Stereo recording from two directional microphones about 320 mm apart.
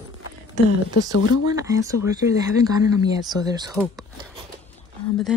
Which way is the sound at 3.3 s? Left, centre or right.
Centre.